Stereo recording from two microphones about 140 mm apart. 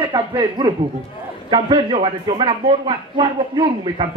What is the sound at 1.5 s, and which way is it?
A man's voice, 35° right (ahead or behind).